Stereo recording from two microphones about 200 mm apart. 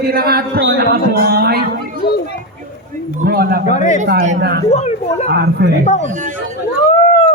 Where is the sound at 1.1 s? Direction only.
50° right (ahead or behind).